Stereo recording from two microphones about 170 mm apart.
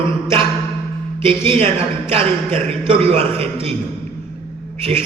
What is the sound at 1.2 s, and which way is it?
A man's voice, 30° right (ahead or behind).